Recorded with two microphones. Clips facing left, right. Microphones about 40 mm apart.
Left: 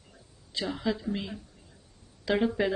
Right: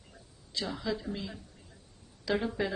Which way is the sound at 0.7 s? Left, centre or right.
Left.